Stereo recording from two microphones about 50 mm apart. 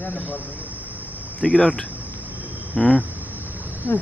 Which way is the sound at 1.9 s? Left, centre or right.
Right.